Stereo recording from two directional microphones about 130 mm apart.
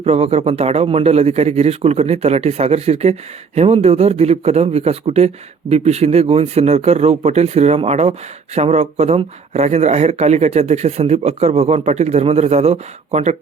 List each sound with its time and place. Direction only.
0.0 s speech: 50° right (ahead or behind)